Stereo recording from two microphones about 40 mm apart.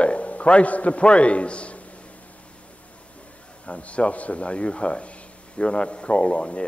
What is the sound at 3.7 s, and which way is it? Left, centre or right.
A man's voice, left.